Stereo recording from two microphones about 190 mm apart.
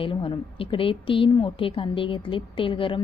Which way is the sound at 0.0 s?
25° left (ahead or behind).